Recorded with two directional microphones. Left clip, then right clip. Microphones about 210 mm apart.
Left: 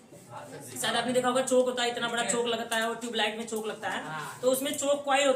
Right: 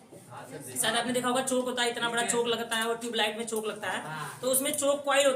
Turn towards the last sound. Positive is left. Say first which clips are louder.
# right 1 dB
turn(degrees=-15)  # may be behind; listen again after turning